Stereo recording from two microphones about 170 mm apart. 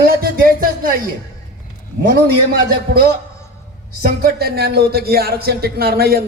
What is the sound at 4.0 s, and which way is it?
A man's voice, 60° right (ahead or behind).